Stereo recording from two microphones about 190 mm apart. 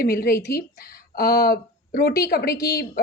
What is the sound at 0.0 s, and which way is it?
A woman's voice, 50° left (ahead or behind).